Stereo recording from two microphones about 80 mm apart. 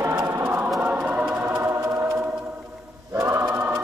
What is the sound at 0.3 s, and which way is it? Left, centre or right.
Choir, right.